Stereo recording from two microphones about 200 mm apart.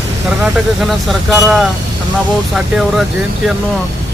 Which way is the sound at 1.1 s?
Centre (ahead or behind).